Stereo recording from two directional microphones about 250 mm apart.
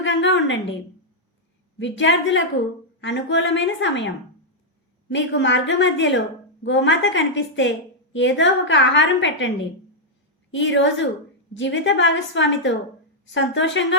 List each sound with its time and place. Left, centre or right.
0.0 s a woman's voice: left
1.8 s a woman's voice: left
10.5 s a woman's voice: left